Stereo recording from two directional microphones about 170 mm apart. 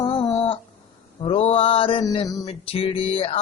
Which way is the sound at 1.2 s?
35° left (ahead or behind).